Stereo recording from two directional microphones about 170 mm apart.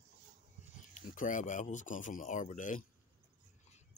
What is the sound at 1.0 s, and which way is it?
Speech, 50° left (ahead or behind).